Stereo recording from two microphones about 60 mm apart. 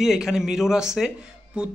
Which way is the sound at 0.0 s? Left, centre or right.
Centre.